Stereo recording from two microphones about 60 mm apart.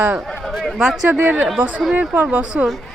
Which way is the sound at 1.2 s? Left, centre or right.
Right.